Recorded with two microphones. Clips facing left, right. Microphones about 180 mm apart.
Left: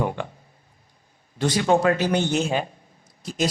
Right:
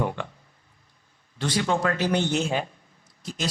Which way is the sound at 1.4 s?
45° left (ahead or behind).